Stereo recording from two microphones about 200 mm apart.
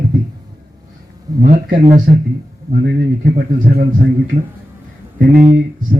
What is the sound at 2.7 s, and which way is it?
Speech, 50° right (ahead or behind).